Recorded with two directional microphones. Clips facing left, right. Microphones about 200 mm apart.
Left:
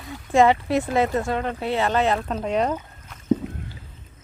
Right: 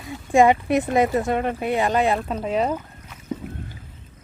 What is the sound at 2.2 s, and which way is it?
Speech, centre (ahead or behind).